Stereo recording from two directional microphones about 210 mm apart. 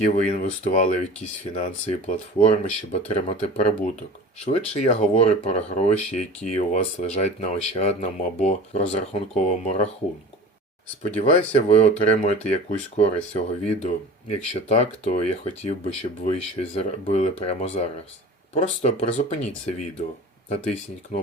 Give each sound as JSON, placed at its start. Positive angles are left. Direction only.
{"t": 0.0, "sound": "speech", "side_deg": 35}
{"t": 11.0, "sound": "speech", "side_deg": 30}